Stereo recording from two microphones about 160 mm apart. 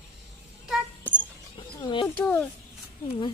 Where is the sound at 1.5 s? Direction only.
30° left (ahead or behind).